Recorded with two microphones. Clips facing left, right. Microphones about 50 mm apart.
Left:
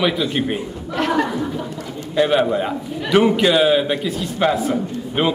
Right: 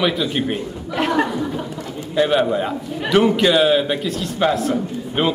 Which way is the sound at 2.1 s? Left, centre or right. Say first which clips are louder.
Even; centre.